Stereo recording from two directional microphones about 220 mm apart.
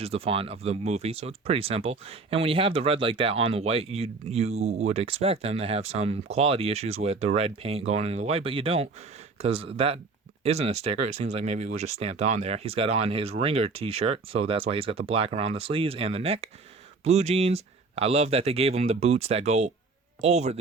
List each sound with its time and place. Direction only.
0.0 s a man's voice: 25° right (ahead or behind)